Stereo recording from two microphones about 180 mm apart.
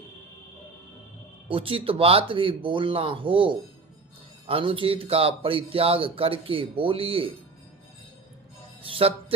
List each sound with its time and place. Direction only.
1.5 s speech: 30° right (ahead or behind)
8.8 s speech: 30° right (ahead or behind)